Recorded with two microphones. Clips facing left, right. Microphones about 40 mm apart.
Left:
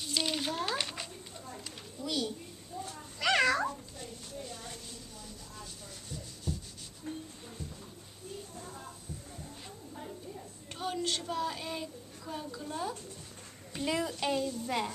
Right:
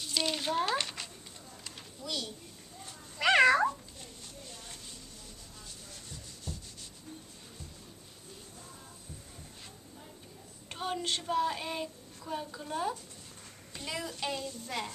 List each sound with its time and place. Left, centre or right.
0.0 s speech: centre
1.6 s a sound: centre
3.2 s cat: centre
4.0 s a sound: centre
6.0 s rub: centre
7.1 s music: left
10.7 s child singing: centre
13.7 s a child's voice: centre